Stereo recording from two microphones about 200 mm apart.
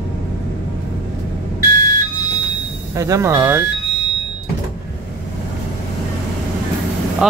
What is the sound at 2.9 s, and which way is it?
Speech, 15° right (ahead or behind).